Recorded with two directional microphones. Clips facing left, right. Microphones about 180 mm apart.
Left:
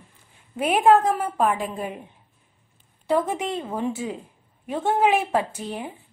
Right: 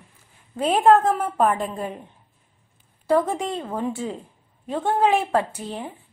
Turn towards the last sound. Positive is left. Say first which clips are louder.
# even
turn(degrees=15)  # may be behind; listen again after turning